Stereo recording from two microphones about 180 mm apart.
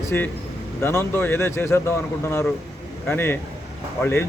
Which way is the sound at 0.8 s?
15° left (ahead or behind).